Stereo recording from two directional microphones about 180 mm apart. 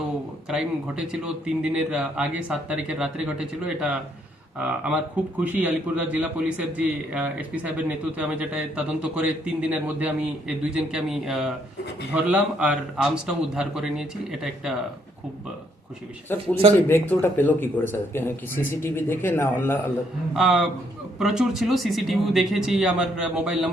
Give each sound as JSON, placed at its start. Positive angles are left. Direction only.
{"t": 0.4, "sound": "a man's voice", "side_deg": -5}
{"t": 16.3, "sound": "speech", "side_deg": 10}
{"t": 20.3, "sound": "a man's voice", "side_deg": 0}